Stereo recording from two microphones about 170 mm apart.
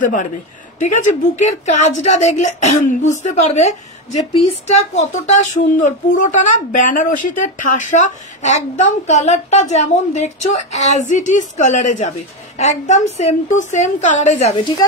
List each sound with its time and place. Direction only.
0.0 s speech: 50° left (ahead or behind)